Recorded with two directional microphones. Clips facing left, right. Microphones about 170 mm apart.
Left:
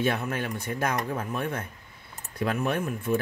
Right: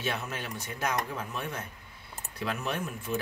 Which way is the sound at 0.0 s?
55° left (ahead or behind).